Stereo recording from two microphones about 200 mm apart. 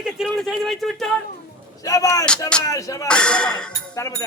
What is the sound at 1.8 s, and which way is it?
Music, 15° left (ahead or behind).